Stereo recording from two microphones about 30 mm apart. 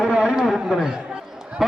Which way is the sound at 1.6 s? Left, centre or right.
Centre.